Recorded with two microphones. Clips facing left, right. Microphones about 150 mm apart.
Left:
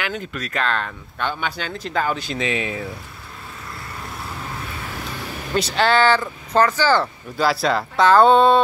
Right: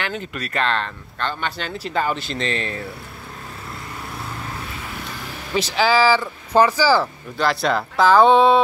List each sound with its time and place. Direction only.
0.0 s speech: centre (ahead or behind)
5.5 s speech: centre (ahead or behind)
7.3 s speech: 5° left (ahead or behind)